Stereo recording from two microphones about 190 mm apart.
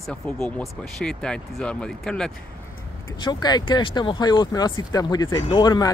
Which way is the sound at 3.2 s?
20° left (ahead or behind).